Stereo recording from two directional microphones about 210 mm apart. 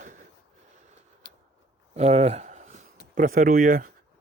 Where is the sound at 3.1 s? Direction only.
40° right (ahead or behind).